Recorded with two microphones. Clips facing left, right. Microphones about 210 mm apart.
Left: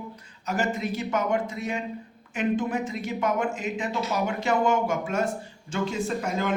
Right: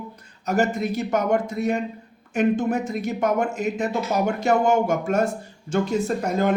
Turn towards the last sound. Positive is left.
turn(degrees=-40)  # may be behind; listen again after turning